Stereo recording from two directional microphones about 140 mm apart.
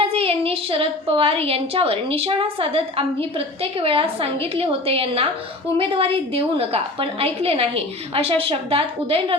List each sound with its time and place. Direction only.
0.0 s a woman's voice: 45° right (ahead or behind)